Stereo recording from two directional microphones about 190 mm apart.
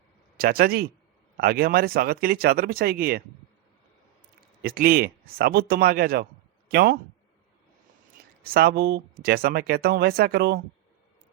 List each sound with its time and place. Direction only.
0.3 s speech: 50° right (ahead or behind)
4.6 s speech: 50° right (ahead or behind)
8.4 s speech: 55° right (ahead or behind)